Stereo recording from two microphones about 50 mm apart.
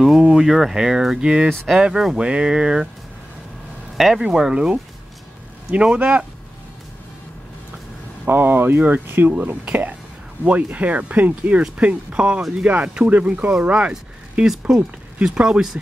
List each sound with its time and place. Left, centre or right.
0.3 s speech: centre
1.2 s speech: centre
3.9 s a sound: centre
4.2 s speech: centre
8.3 s speech: right
9.7 s speech: right